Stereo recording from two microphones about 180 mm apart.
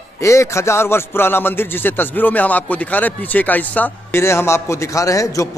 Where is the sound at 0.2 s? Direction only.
15° left (ahead or behind).